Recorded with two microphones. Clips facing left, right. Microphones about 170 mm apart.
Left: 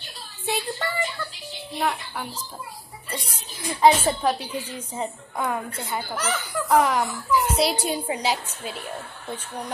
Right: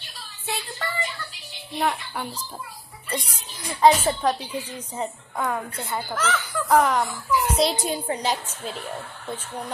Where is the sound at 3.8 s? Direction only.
10° left (ahead or behind).